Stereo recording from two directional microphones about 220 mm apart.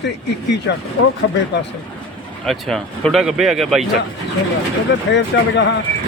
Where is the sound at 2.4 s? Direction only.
Centre (ahead or behind).